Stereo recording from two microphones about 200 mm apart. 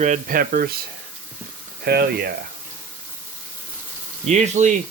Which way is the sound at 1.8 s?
55° right (ahead or behind).